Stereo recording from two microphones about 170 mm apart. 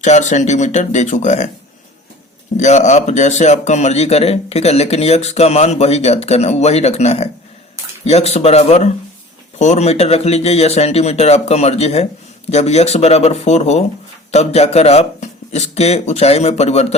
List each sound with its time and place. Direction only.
0.0 s speech: 45° left (ahead or behind)
2.6 s a man's voice: 45° left (ahead or behind)